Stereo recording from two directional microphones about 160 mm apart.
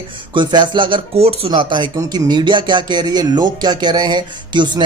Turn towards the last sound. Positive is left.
turn(degrees=-25)  # may be behind; listen again after turning